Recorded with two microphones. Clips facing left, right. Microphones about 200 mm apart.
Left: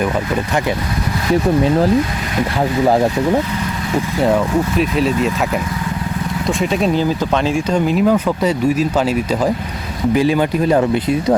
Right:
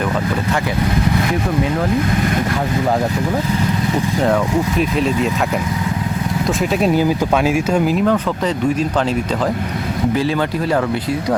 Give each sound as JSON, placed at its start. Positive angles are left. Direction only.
{"t": 4.8, "sound": "speech", "side_deg": 0}
{"t": 6.6, "sound": "speech", "side_deg": -5}
{"t": 8.0, "sound": "speech", "side_deg": 10}
{"t": 10.2, "sound": "speech", "side_deg": 15}